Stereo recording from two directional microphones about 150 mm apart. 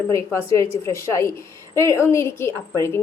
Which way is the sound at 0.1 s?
20° left (ahead or behind).